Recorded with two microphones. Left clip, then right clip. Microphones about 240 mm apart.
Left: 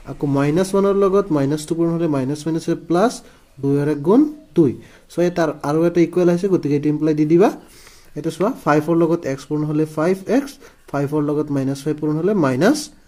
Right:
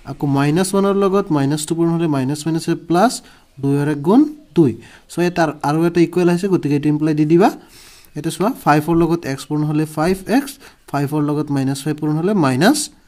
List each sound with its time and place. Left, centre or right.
0.0 s speech: right